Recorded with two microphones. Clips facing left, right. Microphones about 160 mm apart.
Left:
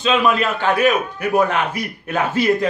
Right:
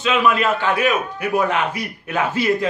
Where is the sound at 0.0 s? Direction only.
35° left (ahead or behind).